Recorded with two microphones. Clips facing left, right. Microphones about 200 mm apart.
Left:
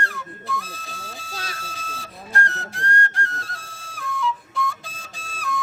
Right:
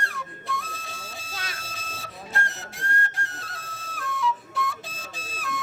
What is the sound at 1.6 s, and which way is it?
Whistle, centre (ahead or behind).